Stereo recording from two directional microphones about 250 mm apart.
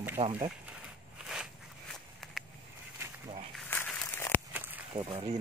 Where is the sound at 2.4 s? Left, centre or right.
Centre.